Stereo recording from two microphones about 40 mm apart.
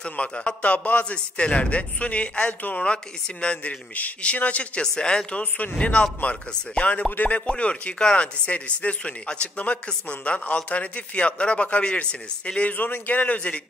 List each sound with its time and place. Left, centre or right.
0.0 s speech: left
4.8 s speech: centre
8.0 s speech: centre
8.5 s speech: left
12.6 s a man's voice: left